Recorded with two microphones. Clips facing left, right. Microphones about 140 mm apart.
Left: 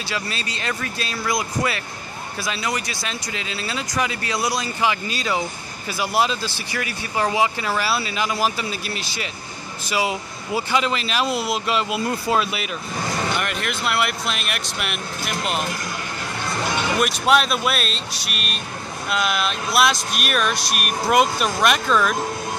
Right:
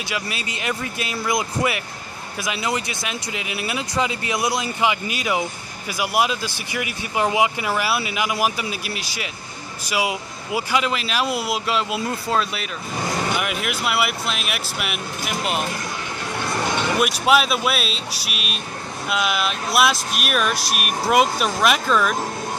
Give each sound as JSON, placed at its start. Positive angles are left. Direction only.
{"t": 0.1, "sound": "speech", "side_deg": -15}
{"t": 13.3, "sound": "speech", "side_deg": -5}
{"t": 17.0, "sound": "speech", "side_deg": -5}